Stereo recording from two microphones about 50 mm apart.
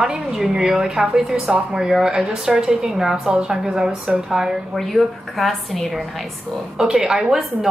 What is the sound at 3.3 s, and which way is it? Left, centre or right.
A woman's voice, centre.